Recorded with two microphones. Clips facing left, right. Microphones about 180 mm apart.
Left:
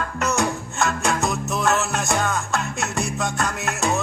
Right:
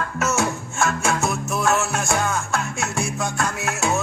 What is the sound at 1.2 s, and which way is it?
Music, 15° left (ahead or behind).